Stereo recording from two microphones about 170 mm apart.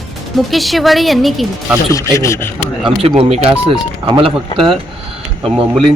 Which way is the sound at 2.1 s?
15° left (ahead or behind).